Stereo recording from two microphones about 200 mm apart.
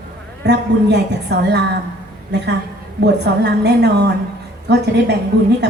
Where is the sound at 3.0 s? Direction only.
55° right (ahead or behind).